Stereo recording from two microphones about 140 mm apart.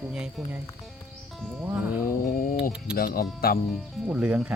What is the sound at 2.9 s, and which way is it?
Music, 90° left.